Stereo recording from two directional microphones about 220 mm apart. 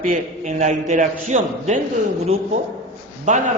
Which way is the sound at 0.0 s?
35° right (ahead or behind).